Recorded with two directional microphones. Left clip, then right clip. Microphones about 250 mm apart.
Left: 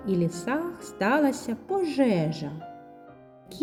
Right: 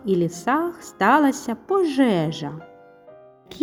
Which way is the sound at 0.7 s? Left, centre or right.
Centre.